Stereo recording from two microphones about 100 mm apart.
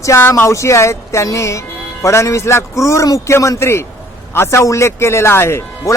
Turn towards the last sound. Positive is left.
turn(degrees=25)  # may be behind; listen again after turning